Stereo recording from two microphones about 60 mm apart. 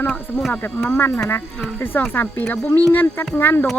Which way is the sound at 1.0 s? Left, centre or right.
Left.